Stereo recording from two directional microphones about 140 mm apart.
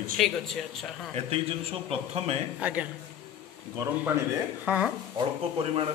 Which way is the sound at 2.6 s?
10° right (ahead or behind).